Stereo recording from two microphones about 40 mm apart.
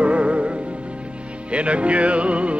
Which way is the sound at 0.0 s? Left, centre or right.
Right.